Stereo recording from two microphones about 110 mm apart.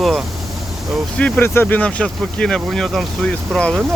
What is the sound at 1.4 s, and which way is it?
Speech, 20° left (ahead or behind).